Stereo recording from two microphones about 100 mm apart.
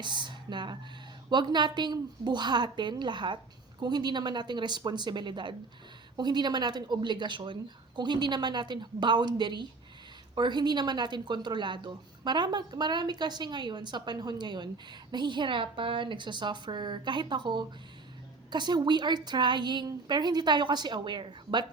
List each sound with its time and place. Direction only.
0.0 s a woman's voice: 50° right (ahead or behind)